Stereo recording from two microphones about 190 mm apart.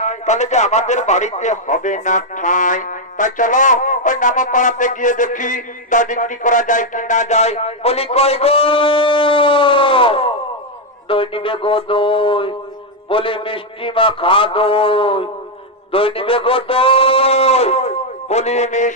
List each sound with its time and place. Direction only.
0.0 s a man's voice: 40° left (ahead or behind)